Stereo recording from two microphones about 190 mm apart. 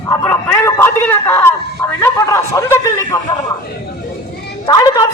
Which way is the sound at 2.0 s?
15° left (ahead or behind).